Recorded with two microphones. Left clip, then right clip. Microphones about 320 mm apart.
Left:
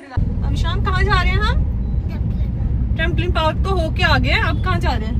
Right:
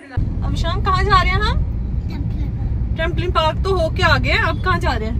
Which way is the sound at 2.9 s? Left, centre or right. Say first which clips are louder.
Right 2 dB; centre.